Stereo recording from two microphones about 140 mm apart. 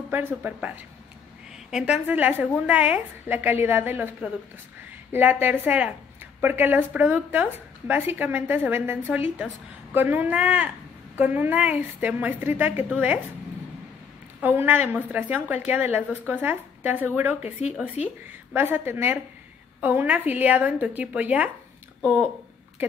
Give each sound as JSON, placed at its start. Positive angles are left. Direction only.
{"t": 0.1, "sound": "speech", "side_deg": -15}
{"t": 14.4, "sound": "speech", "side_deg": -15}
{"t": 18.0, "sound": "a woman's voice", "side_deg": 50}
{"t": 18.5, "sound": "speech", "side_deg": -15}